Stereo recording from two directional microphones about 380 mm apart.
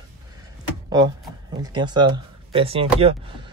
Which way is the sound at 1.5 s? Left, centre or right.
Centre.